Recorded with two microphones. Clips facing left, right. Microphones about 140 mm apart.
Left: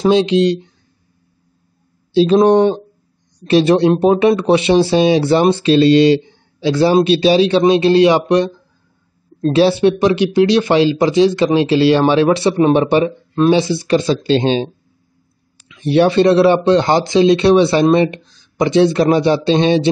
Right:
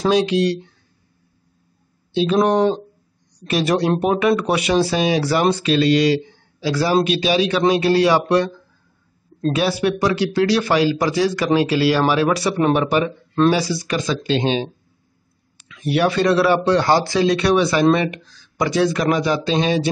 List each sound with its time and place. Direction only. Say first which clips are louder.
0.0 s speech: left 5 dB; 25° left (ahead or behind)
2.1 s speech: left 6 dB; 30° left (ahead or behind)
9.5 s speech: left 7 dB; 30° left (ahead or behind)
15.7 s speech: left 6 dB; 25° left (ahead or behind)